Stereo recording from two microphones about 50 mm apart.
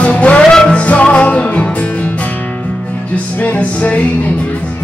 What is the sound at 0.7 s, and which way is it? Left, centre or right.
Music, left.